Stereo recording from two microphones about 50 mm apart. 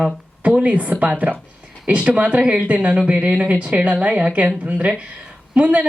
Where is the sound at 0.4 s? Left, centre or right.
Right.